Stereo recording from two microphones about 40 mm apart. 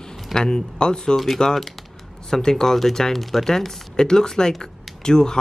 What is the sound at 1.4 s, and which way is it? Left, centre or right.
Speech, centre.